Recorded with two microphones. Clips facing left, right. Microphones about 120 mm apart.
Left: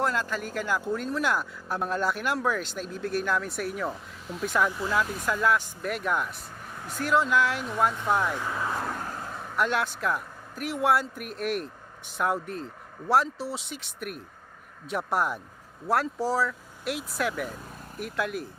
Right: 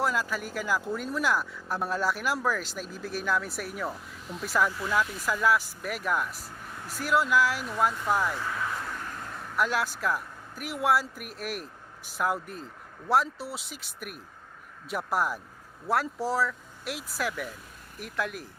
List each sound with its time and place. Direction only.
0.0 s speech: 5° right (ahead or behind)
8.8 s vehicle: 45° left (ahead or behind)
9.6 s speech: centre (ahead or behind)